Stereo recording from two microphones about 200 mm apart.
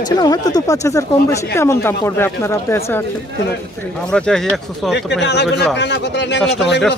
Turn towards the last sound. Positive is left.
turn(degrees=60)  # may be behind; listen again after turning